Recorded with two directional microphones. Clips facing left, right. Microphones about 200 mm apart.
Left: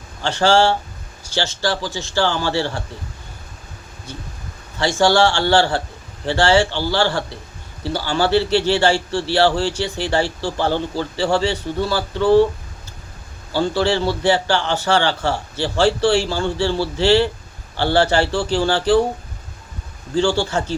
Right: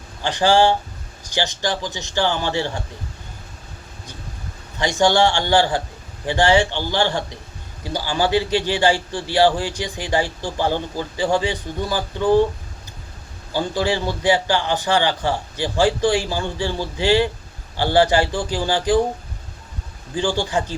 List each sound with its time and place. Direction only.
0.2 s a man's voice: 15° right (ahead or behind)
4.8 s a man's voice: 20° right (ahead or behind)
13.5 s a man's voice: 15° right (ahead or behind)
20.1 s a man's voice: 15° right (ahead or behind)